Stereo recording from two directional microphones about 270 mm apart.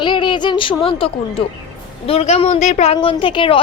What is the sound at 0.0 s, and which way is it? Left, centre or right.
A woman's voice, centre.